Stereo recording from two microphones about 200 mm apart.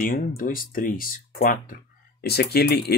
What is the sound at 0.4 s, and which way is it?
Speech, 45° left (ahead or behind).